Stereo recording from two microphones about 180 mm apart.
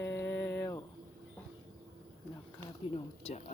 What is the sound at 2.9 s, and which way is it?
Speech, 35° left (ahead or behind).